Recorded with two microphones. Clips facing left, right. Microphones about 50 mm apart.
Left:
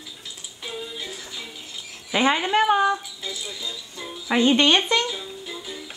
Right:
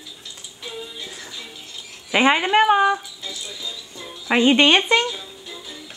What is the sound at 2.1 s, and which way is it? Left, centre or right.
Speech, right.